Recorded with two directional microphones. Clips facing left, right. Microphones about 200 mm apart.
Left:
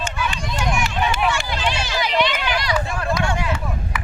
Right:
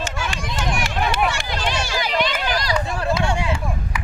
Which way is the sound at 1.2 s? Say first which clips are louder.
Left 1 dB; 50° right (ahead or behind).